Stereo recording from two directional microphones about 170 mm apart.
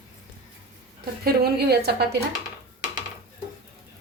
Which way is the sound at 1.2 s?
70° right (ahead or behind).